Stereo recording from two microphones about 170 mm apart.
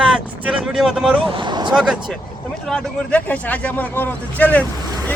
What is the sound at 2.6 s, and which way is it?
Speech, 5° left (ahead or behind).